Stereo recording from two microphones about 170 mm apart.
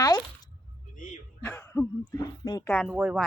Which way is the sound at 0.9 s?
50° left (ahead or behind).